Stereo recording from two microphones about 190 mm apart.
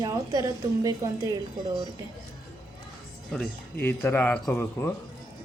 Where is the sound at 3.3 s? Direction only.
5° left (ahead or behind).